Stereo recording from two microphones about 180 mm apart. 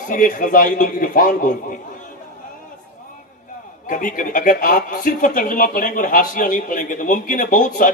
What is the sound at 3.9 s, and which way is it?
Speech, 50° left (ahead or behind).